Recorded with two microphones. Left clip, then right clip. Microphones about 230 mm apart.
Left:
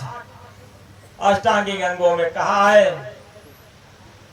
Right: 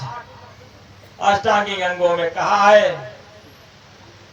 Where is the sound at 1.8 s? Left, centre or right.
Right.